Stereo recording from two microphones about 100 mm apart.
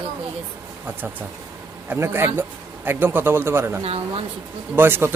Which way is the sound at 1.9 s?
25° right (ahead or behind).